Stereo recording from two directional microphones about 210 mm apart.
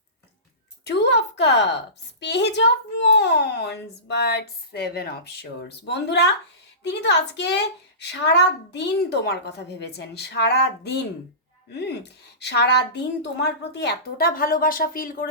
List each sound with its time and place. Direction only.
0.9 s a child's voice: 55° left (ahead or behind)